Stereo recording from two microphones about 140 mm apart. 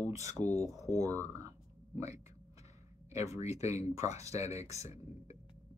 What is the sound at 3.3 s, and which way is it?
Speech, 50° left (ahead or behind).